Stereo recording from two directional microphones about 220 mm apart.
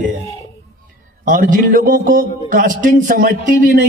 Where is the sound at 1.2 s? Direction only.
35° right (ahead or behind).